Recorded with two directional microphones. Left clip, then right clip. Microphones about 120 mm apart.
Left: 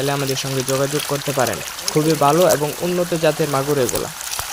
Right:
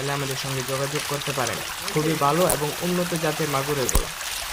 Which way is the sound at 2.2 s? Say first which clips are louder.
Left 6 dB; 45° left (ahead or behind).